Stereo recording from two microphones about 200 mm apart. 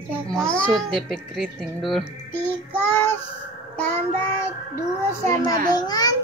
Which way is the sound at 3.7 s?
10° left (ahead or behind).